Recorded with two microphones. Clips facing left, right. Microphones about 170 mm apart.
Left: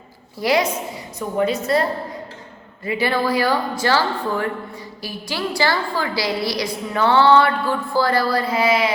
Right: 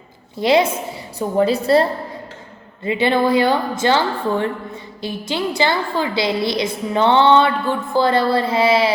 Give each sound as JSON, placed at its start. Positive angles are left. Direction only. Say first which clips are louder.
{"t": 0.3, "sound": "a woman's voice", "louder": "right 4 dB", "side_deg": -25}